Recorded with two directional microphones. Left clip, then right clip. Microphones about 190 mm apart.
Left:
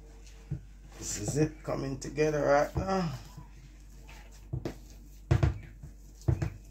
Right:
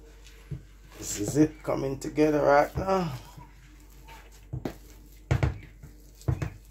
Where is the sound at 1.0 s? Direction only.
35° right (ahead or behind).